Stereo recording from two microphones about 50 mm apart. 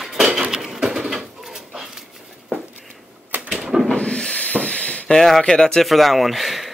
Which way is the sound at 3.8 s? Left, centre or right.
Centre.